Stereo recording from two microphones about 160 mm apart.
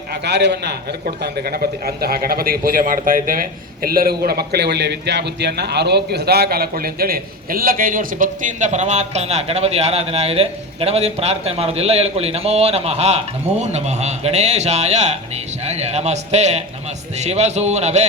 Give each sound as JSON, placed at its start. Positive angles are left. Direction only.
{"t": 0.1, "sound": "a man's voice", "side_deg": -90}
{"t": 1.2, "sound": "a man's voice", "side_deg": -70}